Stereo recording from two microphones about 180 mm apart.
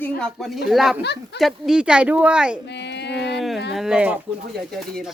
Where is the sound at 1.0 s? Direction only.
70° left (ahead or behind).